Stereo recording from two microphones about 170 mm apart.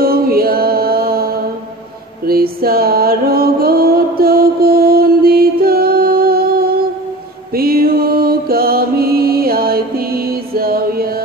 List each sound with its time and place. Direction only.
0.0 s music: 60° right (ahead or behind)
2.2 s a sound: 60° right (ahead or behind)
7.5 s mantra: 60° right (ahead or behind)